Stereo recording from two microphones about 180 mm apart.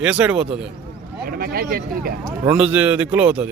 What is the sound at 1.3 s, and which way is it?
Speech, 55° right (ahead or behind).